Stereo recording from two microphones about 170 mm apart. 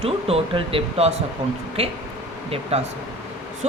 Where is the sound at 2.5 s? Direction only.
35° right (ahead or behind).